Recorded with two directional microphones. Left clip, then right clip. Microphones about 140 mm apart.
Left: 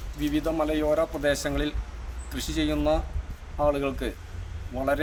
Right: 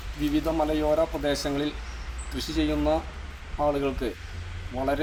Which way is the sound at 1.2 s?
35° left (ahead or behind).